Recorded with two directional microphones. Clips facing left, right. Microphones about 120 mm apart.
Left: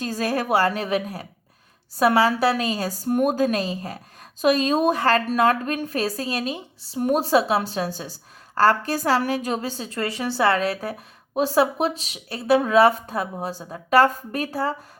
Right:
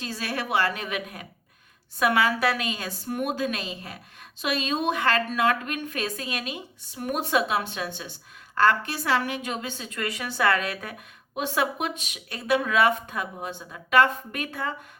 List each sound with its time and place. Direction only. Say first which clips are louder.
0.0 s a woman's voice: left 7 dB; 40° left (ahead or behind)